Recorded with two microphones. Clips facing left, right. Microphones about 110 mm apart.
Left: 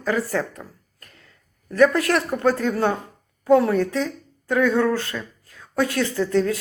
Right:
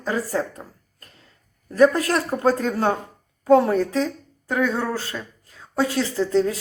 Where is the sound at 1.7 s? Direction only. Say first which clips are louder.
Even; 30° right (ahead or behind).